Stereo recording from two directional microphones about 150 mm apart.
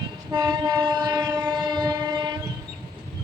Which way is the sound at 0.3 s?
30° right (ahead or behind).